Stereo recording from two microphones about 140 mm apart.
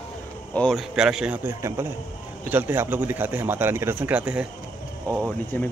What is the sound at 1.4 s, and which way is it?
A man's voice, 20° right (ahead or behind).